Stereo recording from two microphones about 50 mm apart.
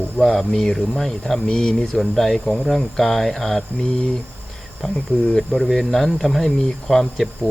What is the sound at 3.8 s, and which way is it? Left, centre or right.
Speech, centre.